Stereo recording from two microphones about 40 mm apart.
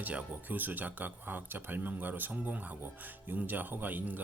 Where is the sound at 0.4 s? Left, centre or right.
Right.